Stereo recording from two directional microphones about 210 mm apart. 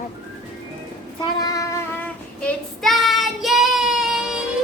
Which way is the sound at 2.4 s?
Centre (ahead or behind).